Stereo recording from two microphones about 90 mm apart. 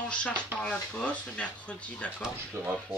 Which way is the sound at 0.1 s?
15° left (ahead or behind).